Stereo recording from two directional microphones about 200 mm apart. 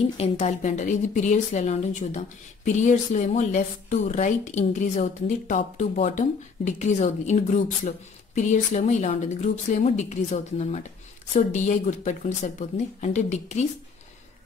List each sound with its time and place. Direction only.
0.2 s a woman's voice: 35° left (ahead or behind)